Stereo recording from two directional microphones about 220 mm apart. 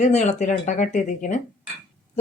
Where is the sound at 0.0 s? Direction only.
30° left (ahead or behind).